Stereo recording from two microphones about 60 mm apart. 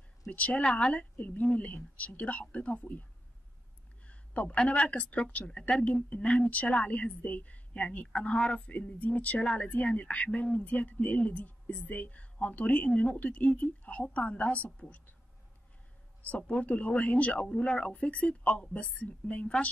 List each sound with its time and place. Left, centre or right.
0.3 s speech: left
16.3 s speech: left